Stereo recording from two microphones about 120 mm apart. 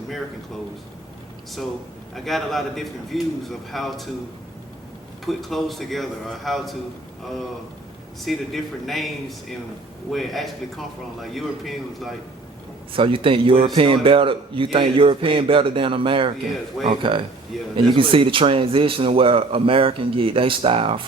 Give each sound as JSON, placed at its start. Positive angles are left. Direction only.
{"t": 2.1, "sound": "a man's voice", "side_deg": 0}
{"t": 5.2, "sound": "a man's voice", "side_deg": 0}
{"t": 8.2, "sound": "a man's voice", "side_deg": 0}
{"t": 10.1, "sound": "a man's voice", "side_deg": 0}
{"t": 12.9, "sound": "a man's voice", "side_deg": -45}